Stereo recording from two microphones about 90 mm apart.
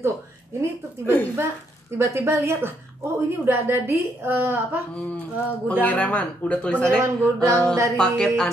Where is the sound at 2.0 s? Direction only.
30° right (ahead or behind).